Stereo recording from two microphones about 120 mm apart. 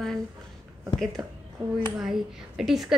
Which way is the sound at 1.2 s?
30° right (ahead or behind).